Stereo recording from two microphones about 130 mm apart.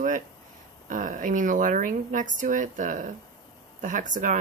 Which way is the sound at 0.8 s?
90° right.